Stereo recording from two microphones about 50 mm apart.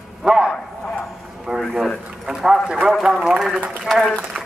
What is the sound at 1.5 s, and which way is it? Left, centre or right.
Speech, centre.